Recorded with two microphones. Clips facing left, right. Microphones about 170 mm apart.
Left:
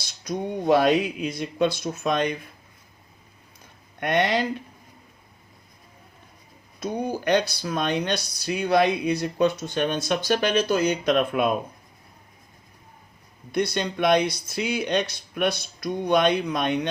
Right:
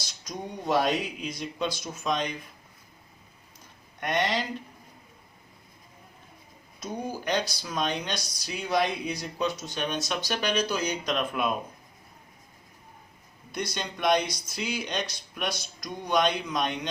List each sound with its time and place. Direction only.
0.3 s speech: 60° left (ahead or behind)
4.0 s speech: 60° left (ahead or behind)
7.3 s speech: 60° left (ahead or behind)
13.5 s speech: 60° left (ahead or behind)